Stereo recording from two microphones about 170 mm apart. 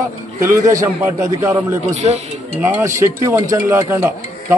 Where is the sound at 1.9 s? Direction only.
40° right (ahead or behind).